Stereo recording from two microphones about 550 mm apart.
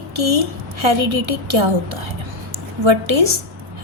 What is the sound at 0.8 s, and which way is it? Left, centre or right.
Speech, right.